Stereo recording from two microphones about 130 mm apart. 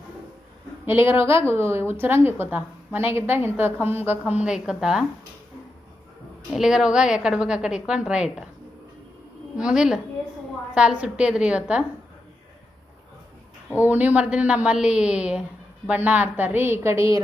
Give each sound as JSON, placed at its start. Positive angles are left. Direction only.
{"t": 0.9, "sound": "a woman's voice", "side_deg": -20}
{"t": 6.5, "sound": "a woman's voice", "side_deg": -5}
{"t": 9.6, "sound": "a woman's voice", "side_deg": -5}
{"t": 13.8, "sound": "a woman's voice", "side_deg": -10}